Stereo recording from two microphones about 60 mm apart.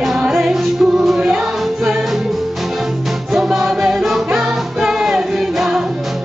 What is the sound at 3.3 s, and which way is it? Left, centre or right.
Music, centre.